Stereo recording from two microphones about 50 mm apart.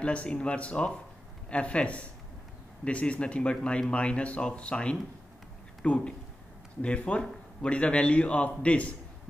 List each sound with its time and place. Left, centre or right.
0.0 s a man's voice: left